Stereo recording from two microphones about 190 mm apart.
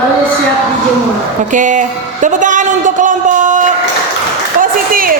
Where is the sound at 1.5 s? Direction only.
40° right (ahead or behind).